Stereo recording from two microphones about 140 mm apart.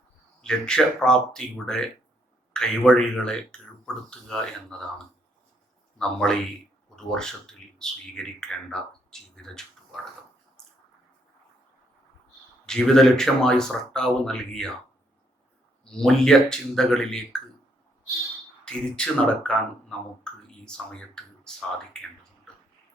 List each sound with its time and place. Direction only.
0.4 s speech: 5° left (ahead or behind)
6.0 s speech: 5° left (ahead or behind)
12.6 s speech: 5° left (ahead or behind)
15.8 s speech: 5° left (ahead or behind)
18.6 s speech: 5° left (ahead or behind)
20.7 s speech: 5° left (ahead or behind)